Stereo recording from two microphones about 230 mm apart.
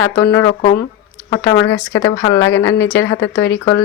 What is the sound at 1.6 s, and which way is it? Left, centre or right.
Speech, left.